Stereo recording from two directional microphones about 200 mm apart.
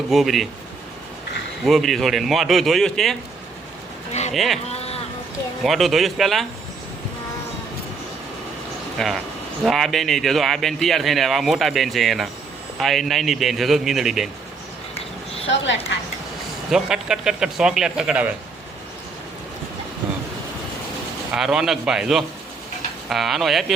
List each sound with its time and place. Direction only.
0.1 s speech: centre (ahead or behind)
1.6 s speech: centre (ahead or behind)
4.1 s speech: 35° left (ahead or behind)
4.4 s speech: centre (ahead or behind)
4.7 s a sound: 30° left (ahead or behind)
5.6 s speech: centre (ahead or behind)
9.0 s speech: centre (ahead or behind)
15.4 s a woman's voice: 65° left (ahead or behind)
16.7 s speech: 5° right (ahead or behind)
21.3 s speech: centre (ahead or behind)